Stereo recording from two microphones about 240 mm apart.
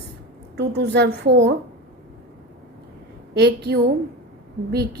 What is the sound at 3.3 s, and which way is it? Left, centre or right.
Speech, right.